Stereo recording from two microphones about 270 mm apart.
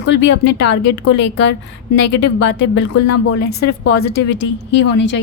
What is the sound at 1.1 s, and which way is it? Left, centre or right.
A woman's voice, left.